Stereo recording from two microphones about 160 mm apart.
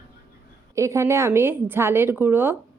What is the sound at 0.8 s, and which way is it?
A woman's voice, 20° right (ahead or behind).